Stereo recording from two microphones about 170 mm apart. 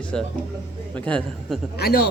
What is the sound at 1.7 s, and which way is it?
Speech, 70° left (ahead or behind).